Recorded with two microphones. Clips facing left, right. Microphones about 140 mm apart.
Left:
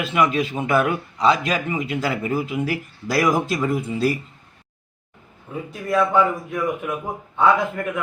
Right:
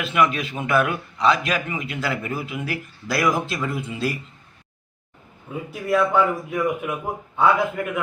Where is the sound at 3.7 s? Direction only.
40° left (ahead or behind).